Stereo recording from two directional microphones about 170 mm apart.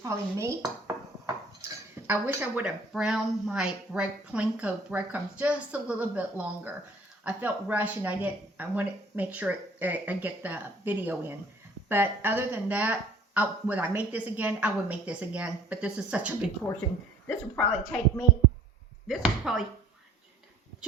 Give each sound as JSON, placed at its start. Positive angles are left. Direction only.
{"t": 0.0, "sound": "a woman's voice", "side_deg": -15}
{"t": 2.0, "sound": "a woman's voice", "side_deg": -10}
{"t": 17.2, "sound": "a woman's voice", "side_deg": 15}
{"t": 19.0, "sound": "chopping", "side_deg": -5}